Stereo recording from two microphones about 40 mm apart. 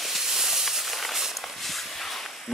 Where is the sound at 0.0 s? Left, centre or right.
Centre.